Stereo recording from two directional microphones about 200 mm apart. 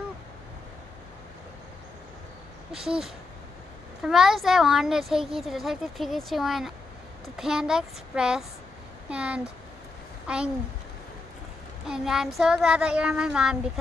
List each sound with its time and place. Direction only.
2.7 s a woman's voice: centre (ahead or behind)
11.9 s a woman's voice: centre (ahead or behind)